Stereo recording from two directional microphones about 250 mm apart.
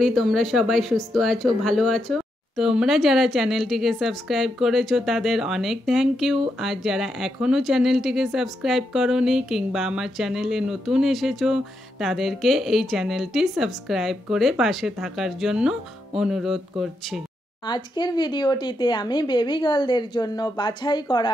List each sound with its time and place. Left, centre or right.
0.0 s speech: centre
17.6 s speech: centre